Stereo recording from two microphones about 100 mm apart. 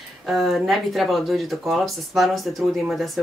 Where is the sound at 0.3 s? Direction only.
Centre (ahead or behind).